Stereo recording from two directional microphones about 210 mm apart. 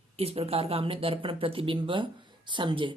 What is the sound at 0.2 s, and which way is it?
Speech, 30° right (ahead or behind).